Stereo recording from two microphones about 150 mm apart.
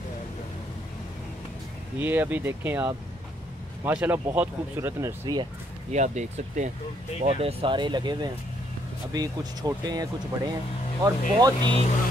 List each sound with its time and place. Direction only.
2.0 s speech: 15° right (ahead or behind)
5.9 s speech: 50° right (ahead or behind)
7.2 s speech: 40° right (ahead or behind)